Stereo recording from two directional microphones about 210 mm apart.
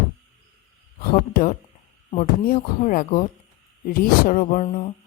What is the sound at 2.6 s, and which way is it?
Speech, 40° left (ahead or behind).